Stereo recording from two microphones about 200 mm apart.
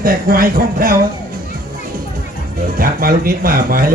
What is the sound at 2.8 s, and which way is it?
Speech, 45° right (ahead or behind).